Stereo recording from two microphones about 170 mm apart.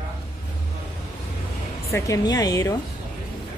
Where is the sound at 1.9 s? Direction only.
20° left (ahead or behind).